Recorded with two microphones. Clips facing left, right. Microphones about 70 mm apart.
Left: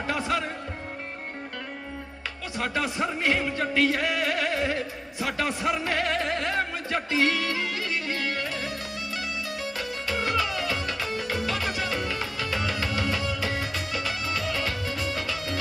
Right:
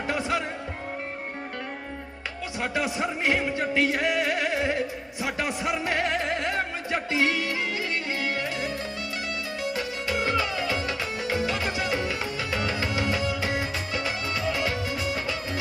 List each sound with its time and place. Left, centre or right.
0.1 s music: centre
2.6 s music: centre
5.2 s speech: centre
8.2 s music: centre